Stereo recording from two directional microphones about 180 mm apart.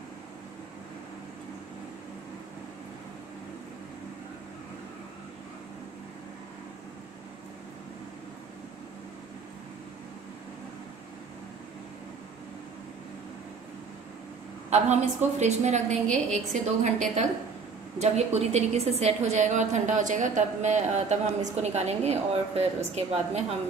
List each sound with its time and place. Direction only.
14.7 s a woman's voice: 40° right (ahead or behind)